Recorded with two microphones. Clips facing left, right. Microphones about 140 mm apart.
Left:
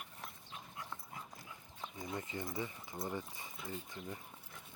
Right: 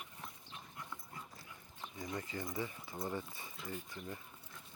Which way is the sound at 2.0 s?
25° left (ahead or behind).